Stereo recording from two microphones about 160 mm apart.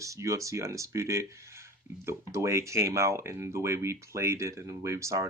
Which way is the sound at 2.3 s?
20° right (ahead or behind).